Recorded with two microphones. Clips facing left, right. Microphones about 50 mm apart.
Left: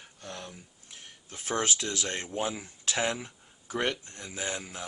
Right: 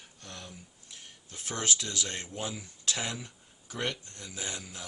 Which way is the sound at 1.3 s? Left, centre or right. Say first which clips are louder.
Left 4 dB; left.